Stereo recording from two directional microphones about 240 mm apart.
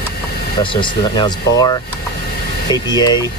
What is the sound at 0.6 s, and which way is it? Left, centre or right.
Speech, centre.